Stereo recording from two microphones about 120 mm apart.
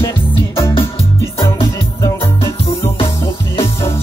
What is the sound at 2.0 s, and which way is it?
Music, 30° left (ahead or behind).